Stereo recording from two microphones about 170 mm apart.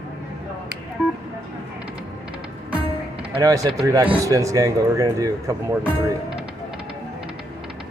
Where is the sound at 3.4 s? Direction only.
20° right (ahead or behind).